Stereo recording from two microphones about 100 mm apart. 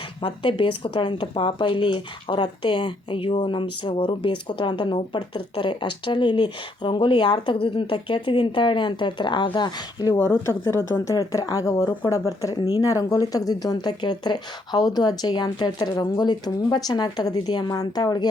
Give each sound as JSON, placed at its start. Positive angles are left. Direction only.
{"t": 0.2, "sound": "speech", "side_deg": 60}
{"t": 10.2, "sound": "speech", "side_deg": 25}